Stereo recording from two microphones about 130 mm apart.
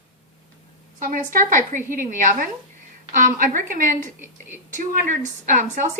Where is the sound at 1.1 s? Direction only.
90° right.